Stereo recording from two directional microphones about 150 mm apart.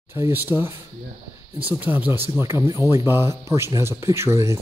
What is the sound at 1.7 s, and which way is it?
Speech, 10° right (ahead or behind).